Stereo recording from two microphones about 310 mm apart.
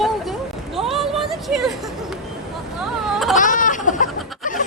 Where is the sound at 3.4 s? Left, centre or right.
Left.